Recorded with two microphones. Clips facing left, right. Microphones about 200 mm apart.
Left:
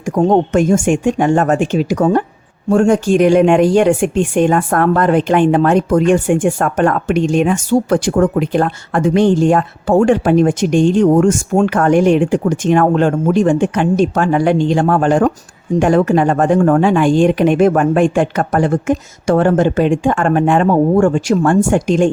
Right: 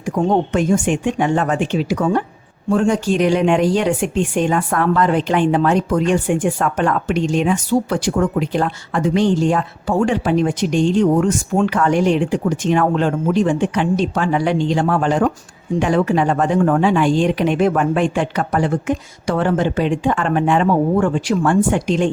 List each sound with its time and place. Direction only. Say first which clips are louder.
0.0 s speech: left 5 dB; 45° left (ahead or behind)